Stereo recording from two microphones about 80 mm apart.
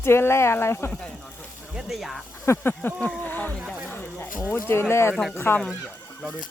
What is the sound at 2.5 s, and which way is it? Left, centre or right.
Speech, left.